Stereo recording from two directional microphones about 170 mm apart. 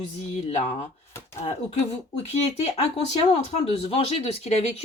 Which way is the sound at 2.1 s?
40° left (ahead or behind).